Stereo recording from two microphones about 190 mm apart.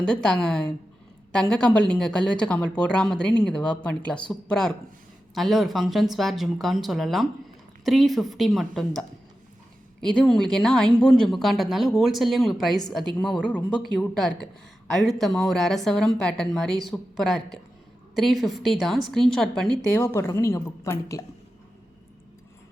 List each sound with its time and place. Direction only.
0.0 s a woman's voice: 5° left (ahead or behind)